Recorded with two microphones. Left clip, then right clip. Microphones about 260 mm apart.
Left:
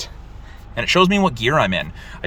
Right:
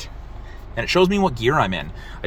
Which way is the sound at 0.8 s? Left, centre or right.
Centre.